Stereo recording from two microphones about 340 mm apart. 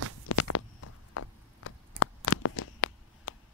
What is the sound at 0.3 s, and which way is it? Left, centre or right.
Walk, left.